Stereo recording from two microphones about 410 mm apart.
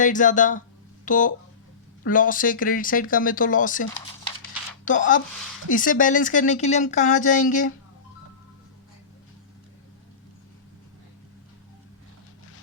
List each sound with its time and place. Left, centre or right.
0.0 s speech: centre